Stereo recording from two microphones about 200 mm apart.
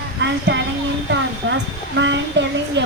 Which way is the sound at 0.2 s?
60° right (ahead or behind).